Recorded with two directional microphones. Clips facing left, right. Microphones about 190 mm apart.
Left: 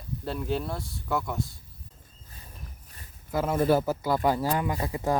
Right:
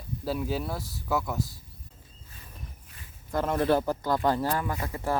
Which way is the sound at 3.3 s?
5° left (ahead or behind).